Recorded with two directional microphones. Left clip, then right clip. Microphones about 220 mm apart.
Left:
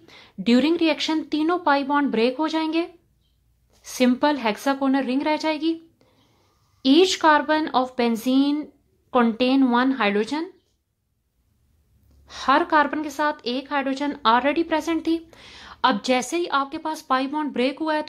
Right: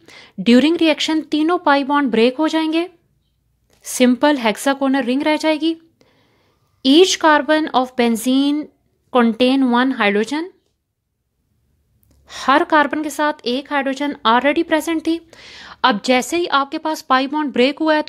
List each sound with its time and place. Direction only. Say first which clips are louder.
0.0 s a woman's voice: right 7 dB; 30° right (ahead or behind)
12.3 s a woman's voice: right 5 dB; 30° right (ahead or behind)